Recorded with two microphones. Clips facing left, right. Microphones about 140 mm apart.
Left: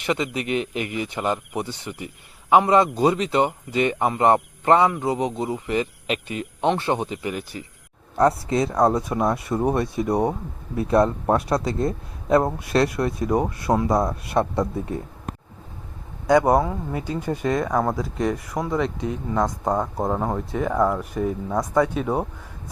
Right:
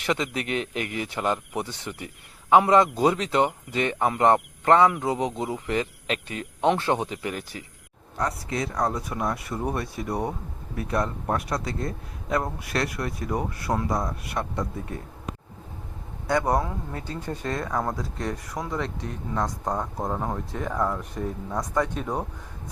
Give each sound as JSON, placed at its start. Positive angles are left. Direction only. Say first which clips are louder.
{"t": 0.0, "sound": "speech", "louder": "left 2 dB", "side_deg": 5}
{"t": 5.0, "sound": "speech", "louder": "left 3 dB", "side_deg": 0}
{"t": 8.2, "sound": "a man's voice", "louder": "left 9 dB", "side_deg": 30}
{"t": 16.5, "sound": "speech", "louder": "left 6 dB", "side_deg": 10}
{"t": 19.6, "sound": "speech", "louder": "left 5 dB", "side_deg": 30}
{"t": 20.1, "sound": "speech", "louder": "left 5 dB", "side_deg": 10}